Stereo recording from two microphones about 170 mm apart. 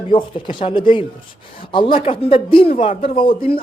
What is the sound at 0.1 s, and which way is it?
A man's voice, 30° left (ahead or behind).